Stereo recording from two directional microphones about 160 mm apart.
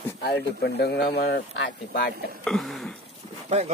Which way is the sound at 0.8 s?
90° left.